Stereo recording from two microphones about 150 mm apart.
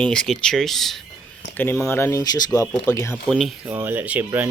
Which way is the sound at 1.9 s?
15° left (ahead or behind).